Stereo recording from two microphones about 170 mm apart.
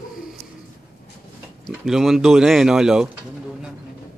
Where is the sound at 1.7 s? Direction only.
Centre (ahead or behind).